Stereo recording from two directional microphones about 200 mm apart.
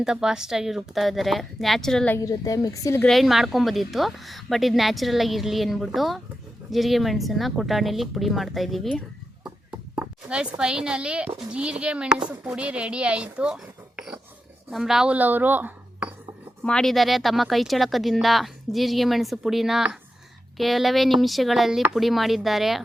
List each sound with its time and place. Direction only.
0.0 s speech: 5° right (ahead or behind)
2.1 s a woman's voice: 15° left (ahead or behind)
3.0 s speech: centre (ahead or behind)
9.9 s chop: 5° right (ahead or behind)
10.6 s speech: 5° right (ahead or behind)
16.6 s speech: 5° left (ahead or behind)